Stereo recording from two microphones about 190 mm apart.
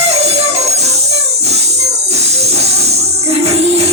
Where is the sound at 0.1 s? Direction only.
35° right (ahead or behind).